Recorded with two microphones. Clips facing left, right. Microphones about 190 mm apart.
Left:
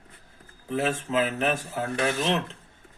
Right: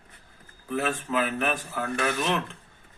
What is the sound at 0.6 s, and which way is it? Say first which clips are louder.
Speech: left 1 dB; 25° left (ahead or behind).